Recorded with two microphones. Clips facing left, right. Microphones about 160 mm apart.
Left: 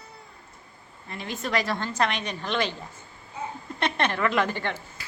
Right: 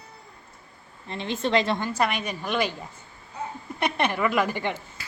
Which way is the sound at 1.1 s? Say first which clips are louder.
Right 5 dB; 25° right (ahead or behind).